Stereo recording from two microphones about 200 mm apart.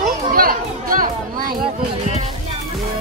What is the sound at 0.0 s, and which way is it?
Chatter, 45° right (ahead or behind).